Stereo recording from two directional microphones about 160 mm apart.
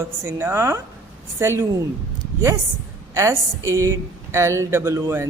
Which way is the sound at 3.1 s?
20° right (ahead or behind).